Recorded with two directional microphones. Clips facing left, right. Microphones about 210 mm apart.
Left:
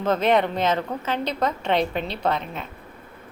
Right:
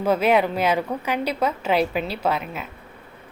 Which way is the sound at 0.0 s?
10° right (ahead or behind).